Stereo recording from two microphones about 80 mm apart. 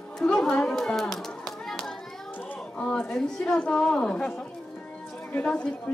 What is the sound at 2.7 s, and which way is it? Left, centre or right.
A woman's voice, centre.